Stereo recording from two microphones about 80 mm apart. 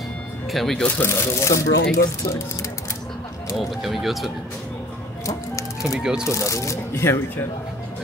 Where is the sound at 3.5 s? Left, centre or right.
Centre.